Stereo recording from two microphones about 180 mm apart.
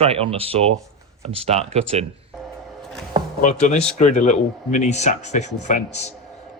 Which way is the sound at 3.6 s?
40° left (ahead or behind).